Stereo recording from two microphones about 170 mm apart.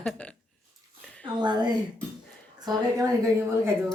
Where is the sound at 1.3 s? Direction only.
25° right (ahead or behind).